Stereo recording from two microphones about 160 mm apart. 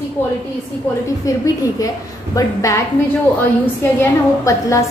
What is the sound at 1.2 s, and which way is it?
A woman's voice, 20° left (ahead or behind).